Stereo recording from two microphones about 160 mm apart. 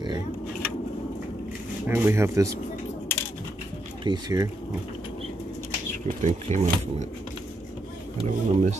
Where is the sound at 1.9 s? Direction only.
15° right (ahead or behind).